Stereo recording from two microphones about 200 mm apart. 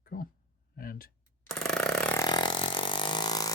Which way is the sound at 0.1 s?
45° left (ahead or behind).